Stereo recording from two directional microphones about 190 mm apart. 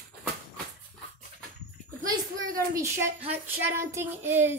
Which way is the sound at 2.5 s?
15° right (ahead or behind).